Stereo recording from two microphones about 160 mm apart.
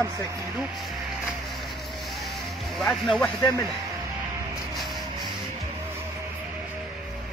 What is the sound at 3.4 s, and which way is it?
Speech, 20° left (ahead or behind).